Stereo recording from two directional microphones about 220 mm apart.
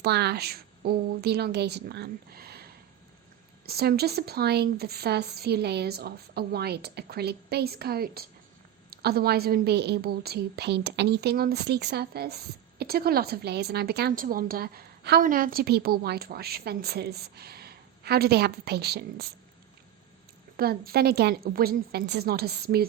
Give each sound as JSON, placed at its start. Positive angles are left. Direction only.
{"t": 0.0, "sound": "a woman's voice", "side_deg": -50}
{"t": 3.7, "sound": "a woman's voice", "side_deg": -45}
{"t": 20.6, "sound": "a woman's voice", "side_deg": -45}